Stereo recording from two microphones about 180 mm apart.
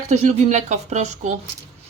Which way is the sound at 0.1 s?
40° right (ahead or behind).